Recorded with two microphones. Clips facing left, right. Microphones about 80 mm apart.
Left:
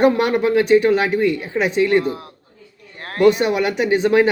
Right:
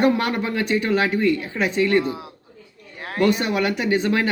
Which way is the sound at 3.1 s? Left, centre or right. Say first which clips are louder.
Left 5 dB; centre.